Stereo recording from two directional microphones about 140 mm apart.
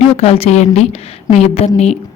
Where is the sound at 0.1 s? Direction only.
45° left (ahead or behind).